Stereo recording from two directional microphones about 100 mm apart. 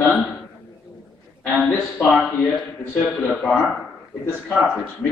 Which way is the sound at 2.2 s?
Centre (ahead or behind).